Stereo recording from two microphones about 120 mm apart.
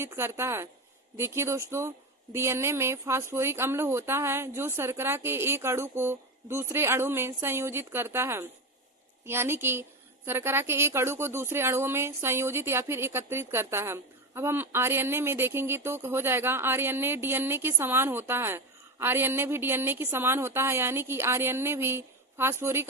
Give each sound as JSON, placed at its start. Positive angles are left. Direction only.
{"t": 0.0, "sound": "speech", "side_deg": -20}